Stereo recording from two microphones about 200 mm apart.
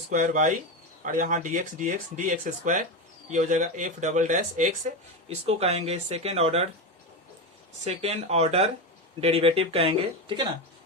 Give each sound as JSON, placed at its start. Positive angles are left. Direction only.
{"t": 0.1, "sound": "speech", "side_deg": -40}
{"t": 7.9, "sound": "speech", "side_deg": -30}